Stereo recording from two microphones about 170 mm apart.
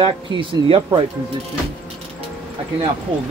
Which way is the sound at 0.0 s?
30° right (ahead or behind).